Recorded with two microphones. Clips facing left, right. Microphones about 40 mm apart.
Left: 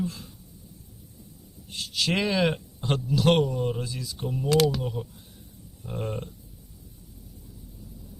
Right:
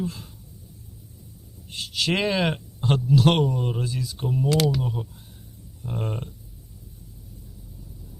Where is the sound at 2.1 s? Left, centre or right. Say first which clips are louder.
Right 1 dB; right.